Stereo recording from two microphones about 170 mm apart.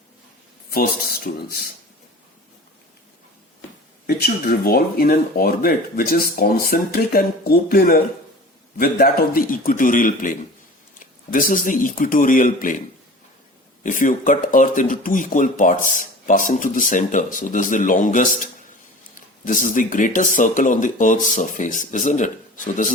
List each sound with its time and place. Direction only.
0.7 s speech: 60° left (ahead or behind)
4.0 s speech: 65° left (ahead or behind)
13.8 s speech: 50° left (ahead or behind)
19.5 s speech: 50° left (ahead or behind)